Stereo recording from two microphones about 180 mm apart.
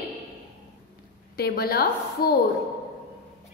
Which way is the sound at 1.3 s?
60° left (ahead or behind).